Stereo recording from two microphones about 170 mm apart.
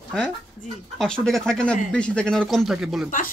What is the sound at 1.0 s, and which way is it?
Speech, centre (ahead or behind).